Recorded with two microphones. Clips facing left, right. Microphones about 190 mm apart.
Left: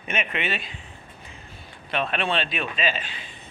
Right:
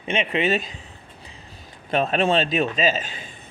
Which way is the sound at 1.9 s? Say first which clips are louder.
Right 6 dB; 40° right (ahead or behind).